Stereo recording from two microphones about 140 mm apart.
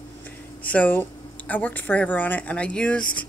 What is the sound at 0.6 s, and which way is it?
Speech, 10° left (ahead or behind).